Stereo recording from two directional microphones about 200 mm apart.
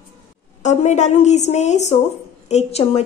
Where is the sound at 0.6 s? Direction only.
35° left (ahead or behind).